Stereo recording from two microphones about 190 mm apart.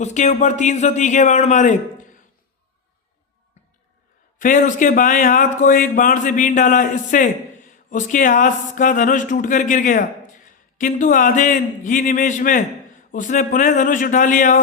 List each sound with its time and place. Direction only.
0.0 s a man's voice: 40° left (ahead or behind)
4.4 s speech: 45° left (ahead or behind)